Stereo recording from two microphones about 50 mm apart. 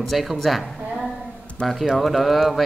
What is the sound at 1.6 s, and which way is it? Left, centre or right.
Speech, centre.